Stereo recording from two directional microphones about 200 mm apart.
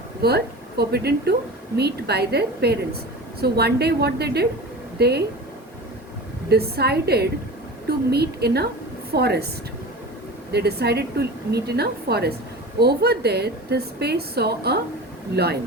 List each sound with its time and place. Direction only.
0.2 s a woman's voice: 55° right (ahead or behind)
6.5 s a woman's voice: 55° right (ahead or behind)
10.5 s a woman's voice: 55° right (ahead or behind)